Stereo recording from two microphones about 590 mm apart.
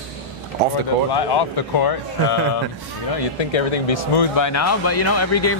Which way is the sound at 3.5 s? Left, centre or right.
Left.